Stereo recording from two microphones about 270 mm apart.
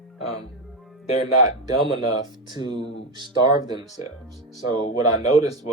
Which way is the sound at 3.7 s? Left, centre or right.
Centre.